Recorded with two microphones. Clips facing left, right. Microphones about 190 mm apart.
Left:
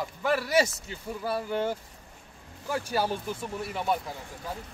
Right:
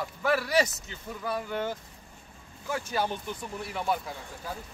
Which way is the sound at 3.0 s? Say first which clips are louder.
Left 2 dB; 5° left (ahead or behind).